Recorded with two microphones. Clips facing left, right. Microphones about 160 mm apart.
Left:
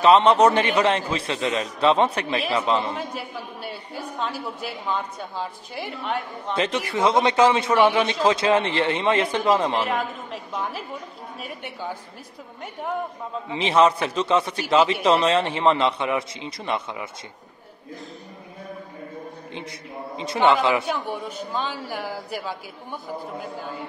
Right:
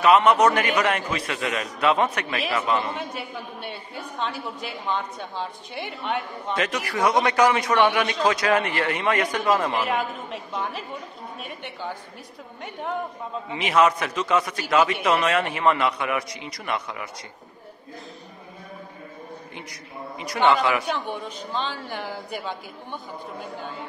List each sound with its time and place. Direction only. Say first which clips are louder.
0.0 s a man's voice: left 2 dB; 30° left (ahead or behind)
3.0 s a woman's voice: left 1 dB; centre (ahead or behind)
6.5 s a man's voice: left 2 dB; 25° left (ahead or behind)
9.8 s a woman's voice: even; centre (ahead or behind)
13.5 s a man's voice: left 2 dB; 30° left (ahead or behind)
20.8 s a man's voice: left 1 dB; 5° left (ahead or behind)